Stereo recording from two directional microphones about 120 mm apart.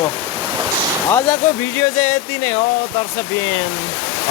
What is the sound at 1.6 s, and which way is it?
Speech, 35° left (ahead or behind).